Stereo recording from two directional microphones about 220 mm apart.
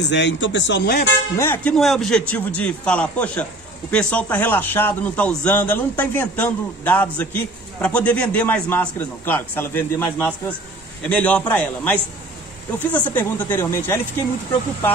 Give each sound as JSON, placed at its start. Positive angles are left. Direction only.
{"t": 0.0, "sound": "speech", "side_deg": 55}
{"t": 1.3, "sound": "a man's voice", "side_deg": 10}